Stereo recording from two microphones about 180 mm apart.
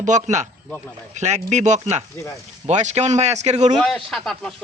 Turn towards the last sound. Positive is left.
turn(degrees=0)  # may be behind; listen again after turning